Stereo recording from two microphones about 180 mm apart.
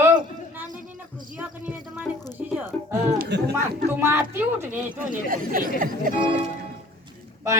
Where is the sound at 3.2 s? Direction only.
65° right (ahead or behind).